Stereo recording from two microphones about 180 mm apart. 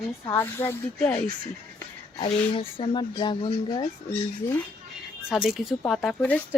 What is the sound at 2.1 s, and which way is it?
Speech, 30° left (ahead or behind).